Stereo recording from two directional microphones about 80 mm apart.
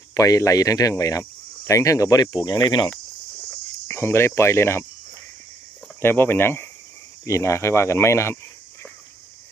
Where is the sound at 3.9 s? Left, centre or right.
Left.